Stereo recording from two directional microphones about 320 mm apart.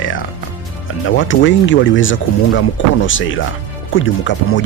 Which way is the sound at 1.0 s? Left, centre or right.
Left.